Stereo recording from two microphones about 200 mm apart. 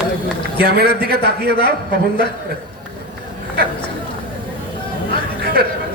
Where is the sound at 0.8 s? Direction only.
50° right (ahead or behind).